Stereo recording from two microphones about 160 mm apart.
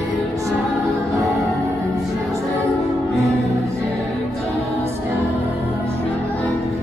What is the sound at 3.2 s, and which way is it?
Music, 20° right (ahead or behind).